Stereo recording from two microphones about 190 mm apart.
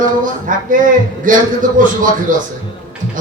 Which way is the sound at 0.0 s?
45° right (ahead or behind).